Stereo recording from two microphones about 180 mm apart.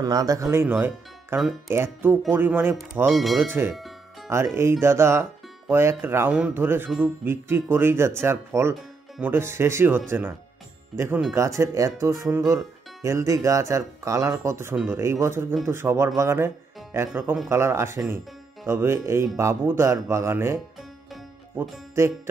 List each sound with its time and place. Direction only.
0.0 s speech: 20° right (ahead or behind)
3.1 s speech: centre (ahead or behind)
3.6 s speech: 10° right (ahead or behind)
21.6 s speech: 10° right (ahead or behind)